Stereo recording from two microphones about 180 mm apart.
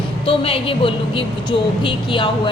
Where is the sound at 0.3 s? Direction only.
30° left (ahead or behind).